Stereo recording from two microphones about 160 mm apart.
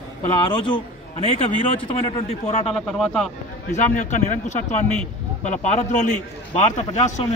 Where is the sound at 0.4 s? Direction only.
30° left (ahead or behind).